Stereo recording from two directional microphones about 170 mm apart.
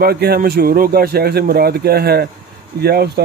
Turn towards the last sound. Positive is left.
turn(degrees=-70)  # may be behind; listen again after turning